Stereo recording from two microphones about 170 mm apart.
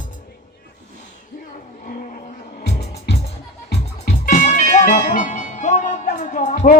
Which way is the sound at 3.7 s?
65° left (ahead or behind).